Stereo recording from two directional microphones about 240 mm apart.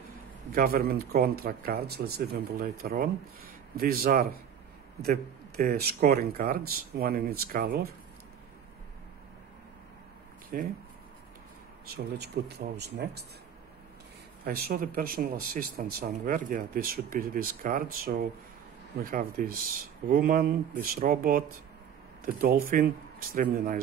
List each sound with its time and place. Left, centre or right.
0.5 s speech: right
10.5 s speech: right
11.9 s speech: right
14.4 s speech: right